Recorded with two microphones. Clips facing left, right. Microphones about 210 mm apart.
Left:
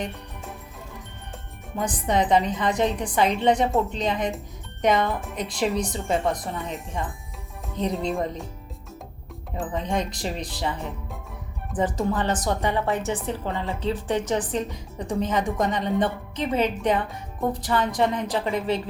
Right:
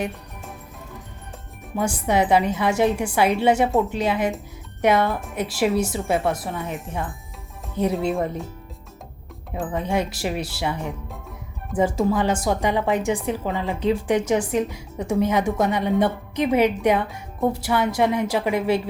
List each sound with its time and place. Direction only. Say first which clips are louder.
1.7 s a woman's voice: right 3 dB; 10° right (ahead or behind)
9.7 s a woman's voice: right 3 dB; 10° right (ahead or behind)